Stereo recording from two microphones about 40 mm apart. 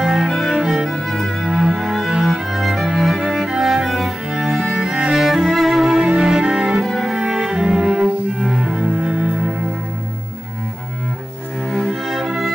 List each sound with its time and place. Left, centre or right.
0.0 s cello: centre
0.3 s cello: centre
0.6 s music: centre
0.8 s music: centre
1.4 s cello: centre
2.3 s music: centre
3.2 s cello: centre
6.1 s music: centre
6.8 s music: centre
7.2 s music: centre
8.5 s cello: centre
11.7 s music: centre